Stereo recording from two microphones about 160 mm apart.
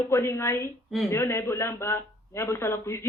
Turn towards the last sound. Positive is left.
turn(degrees=15)  # may be behind; listen again after turning